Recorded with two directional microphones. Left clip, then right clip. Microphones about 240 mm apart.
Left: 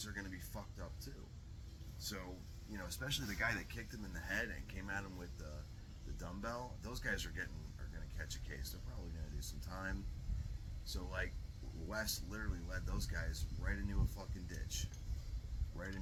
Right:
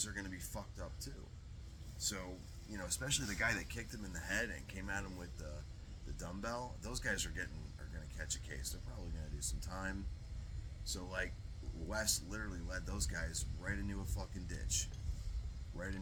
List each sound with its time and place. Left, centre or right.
0.0 s music: right
2.0 s speech: centre